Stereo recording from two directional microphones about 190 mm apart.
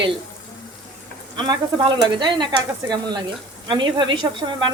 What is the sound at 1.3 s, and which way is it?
Speech, 20° right (ahead or behind).